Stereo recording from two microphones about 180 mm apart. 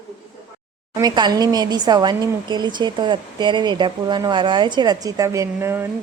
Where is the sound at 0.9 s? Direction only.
20° right (ahead or behind).